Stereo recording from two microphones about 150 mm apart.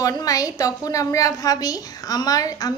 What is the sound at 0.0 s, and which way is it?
A woman's voice, 25° left (ahead or behind).